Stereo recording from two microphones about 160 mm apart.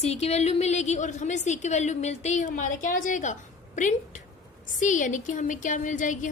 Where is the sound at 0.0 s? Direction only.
40° left (ahead or behind).